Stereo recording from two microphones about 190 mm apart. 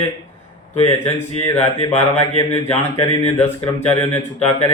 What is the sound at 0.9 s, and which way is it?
Mantra, 10° left (ahead or behind).